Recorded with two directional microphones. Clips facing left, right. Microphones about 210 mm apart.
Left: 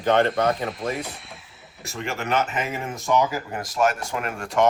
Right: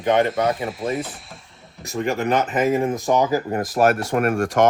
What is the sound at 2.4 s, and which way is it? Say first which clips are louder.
Speech: right 10 dB; 35° right (ahead or behind).